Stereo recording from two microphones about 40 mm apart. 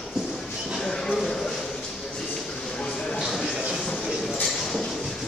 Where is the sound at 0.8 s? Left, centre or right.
Centre.